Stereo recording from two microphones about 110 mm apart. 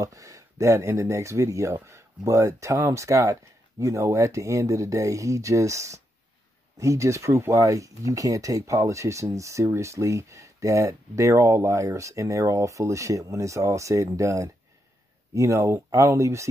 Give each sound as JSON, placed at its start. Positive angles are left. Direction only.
{"t": 0.0, "sound": "speech", "side_deg": -30}